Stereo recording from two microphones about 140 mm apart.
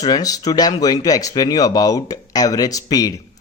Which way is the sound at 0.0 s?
25° left (ahead or behind).